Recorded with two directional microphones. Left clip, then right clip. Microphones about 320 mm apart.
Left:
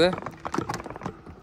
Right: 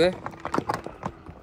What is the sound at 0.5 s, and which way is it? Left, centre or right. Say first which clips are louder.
Typing: right 4 dB; centre.